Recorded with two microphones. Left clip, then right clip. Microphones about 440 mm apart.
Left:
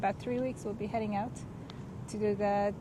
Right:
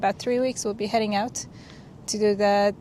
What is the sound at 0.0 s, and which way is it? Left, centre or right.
Speech, right.